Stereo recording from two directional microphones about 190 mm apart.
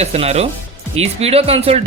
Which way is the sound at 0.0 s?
35° right (ahead or behind).